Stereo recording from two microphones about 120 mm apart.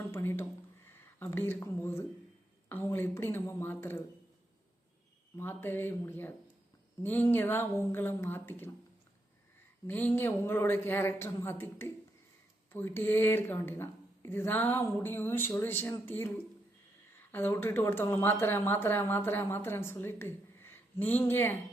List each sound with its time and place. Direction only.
0.1 s a sound: 20° left (ahead or behind)
0.9 s speech: 15° left (ahead or behind)
5.4 s speech: 15° left (ahead or behind)
9.8 s speech: 15° left (ahead or behind)
17.3 s speech: 20° left (ahead or behind)